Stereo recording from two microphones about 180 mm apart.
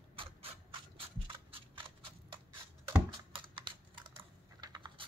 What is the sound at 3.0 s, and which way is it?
Computer keyboard, 30° right (ahead or behind).